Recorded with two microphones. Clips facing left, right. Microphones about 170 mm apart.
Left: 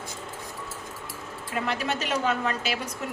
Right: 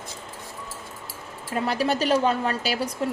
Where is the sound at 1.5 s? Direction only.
35° right (ahead or behind).